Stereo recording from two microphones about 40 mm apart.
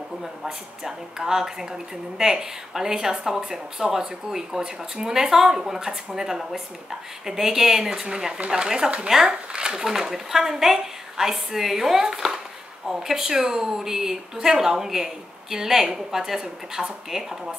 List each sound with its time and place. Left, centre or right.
0.8 s speech: centre
9.8 s speech: centre